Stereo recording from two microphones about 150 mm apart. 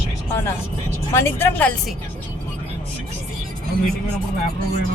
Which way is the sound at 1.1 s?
15° left (ahead or behind).